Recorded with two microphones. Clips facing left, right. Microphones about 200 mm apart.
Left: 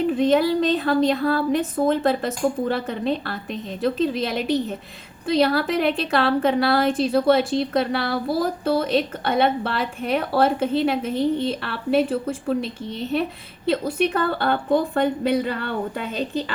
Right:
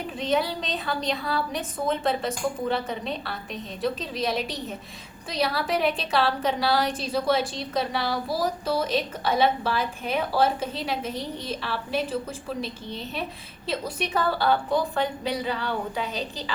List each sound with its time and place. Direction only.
0.1 s a woman's voice: 55° left (ahead or behind)